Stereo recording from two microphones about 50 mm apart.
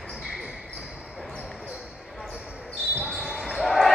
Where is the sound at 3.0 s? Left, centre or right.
Centre.